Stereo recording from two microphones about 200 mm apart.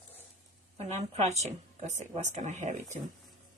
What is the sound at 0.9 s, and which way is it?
A woman's voice, 35° right (ahead or behind).